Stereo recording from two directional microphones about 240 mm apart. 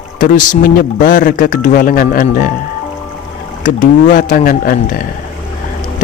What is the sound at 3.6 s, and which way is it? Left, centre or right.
Speech, left.